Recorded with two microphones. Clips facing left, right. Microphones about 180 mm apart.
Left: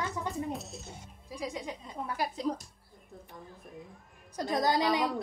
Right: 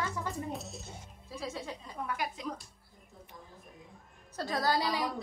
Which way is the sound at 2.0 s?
35° left (ahead or behind).